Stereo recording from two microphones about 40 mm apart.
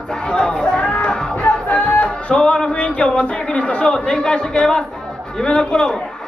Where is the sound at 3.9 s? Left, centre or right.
Centre.